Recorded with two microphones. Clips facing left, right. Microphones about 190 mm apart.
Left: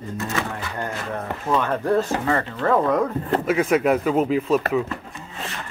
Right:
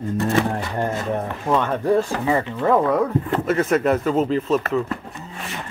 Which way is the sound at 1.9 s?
10° right (ahead or behind).